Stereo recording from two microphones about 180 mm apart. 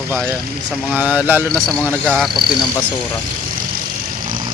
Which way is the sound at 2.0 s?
Centre (ahead or behind).